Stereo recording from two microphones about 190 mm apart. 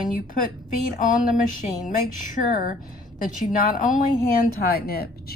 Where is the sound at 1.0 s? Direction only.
40° left (ahead or behind).